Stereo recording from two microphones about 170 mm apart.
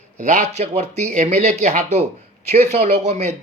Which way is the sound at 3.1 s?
40° right (ahead or behind).